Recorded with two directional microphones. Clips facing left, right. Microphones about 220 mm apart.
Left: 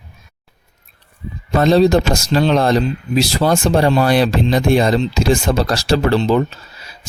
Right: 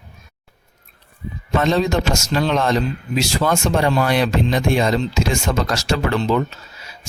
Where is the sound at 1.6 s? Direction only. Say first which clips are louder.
Left 6 dB; 35° left (ahead or behind).